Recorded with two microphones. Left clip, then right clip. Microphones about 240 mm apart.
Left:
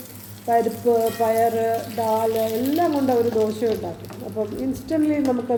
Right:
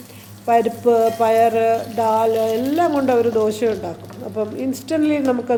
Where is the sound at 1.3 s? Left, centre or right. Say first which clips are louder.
Right 5 dB; centre.